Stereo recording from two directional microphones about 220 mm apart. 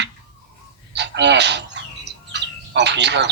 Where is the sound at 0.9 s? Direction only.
50° right (ahead or behind).